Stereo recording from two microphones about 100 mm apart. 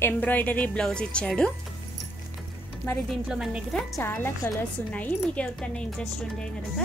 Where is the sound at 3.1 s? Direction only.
5° right (ahead or behind).